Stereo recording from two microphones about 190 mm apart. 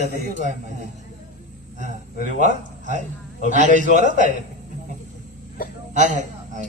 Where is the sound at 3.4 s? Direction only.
40° right (ahead or behind).